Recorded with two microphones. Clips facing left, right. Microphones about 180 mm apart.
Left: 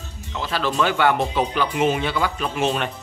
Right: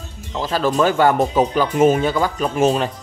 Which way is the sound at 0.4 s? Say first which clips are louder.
Right 5 dB; 40° right (ahead or behind).